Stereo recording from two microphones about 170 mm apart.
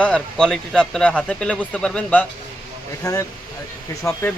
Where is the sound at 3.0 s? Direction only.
20° left (ahead or behind).